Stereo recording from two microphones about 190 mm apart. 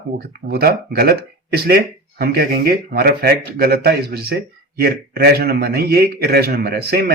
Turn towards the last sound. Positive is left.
turn(degrees=-55)  # may be behind; listen again after turning